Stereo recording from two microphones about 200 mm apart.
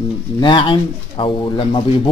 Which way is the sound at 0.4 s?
25° left (ahead or behind).